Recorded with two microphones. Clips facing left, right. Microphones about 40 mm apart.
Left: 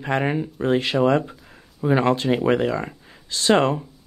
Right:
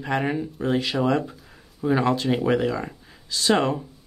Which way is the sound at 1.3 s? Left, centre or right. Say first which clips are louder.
Left 2 dB; centre.